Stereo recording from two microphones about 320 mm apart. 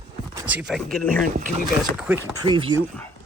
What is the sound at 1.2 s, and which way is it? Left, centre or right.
Speech, right.